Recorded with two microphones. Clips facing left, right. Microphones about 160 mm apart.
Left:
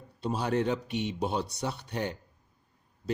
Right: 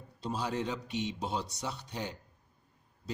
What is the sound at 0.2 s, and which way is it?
Speech, 60° left (ahead or behind).